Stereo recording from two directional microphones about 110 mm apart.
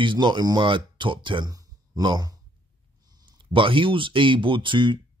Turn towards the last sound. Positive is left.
turn(degrees=-45)  # may be behind; listen again after turning